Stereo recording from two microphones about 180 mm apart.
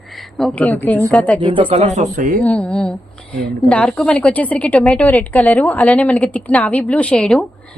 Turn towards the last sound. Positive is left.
turn(degrees=5)  # may be behind; listen again after turning